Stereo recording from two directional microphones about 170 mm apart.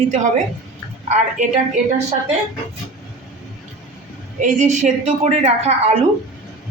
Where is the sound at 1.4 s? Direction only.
45° right (ahead or behind).